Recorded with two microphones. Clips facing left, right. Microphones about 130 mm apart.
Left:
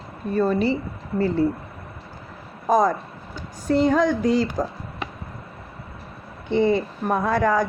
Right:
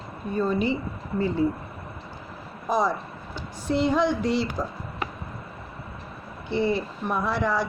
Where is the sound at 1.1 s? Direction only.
40° left (ahead or behind).